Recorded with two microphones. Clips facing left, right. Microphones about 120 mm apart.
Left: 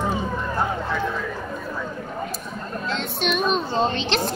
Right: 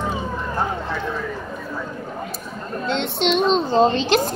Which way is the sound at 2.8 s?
25° right (ahead or behind).